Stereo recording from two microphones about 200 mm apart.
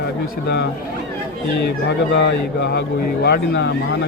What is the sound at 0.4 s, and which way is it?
Speech, 55° left (ahead or behind).